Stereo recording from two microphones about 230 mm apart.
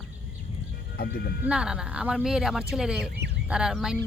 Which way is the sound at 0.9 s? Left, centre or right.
Left.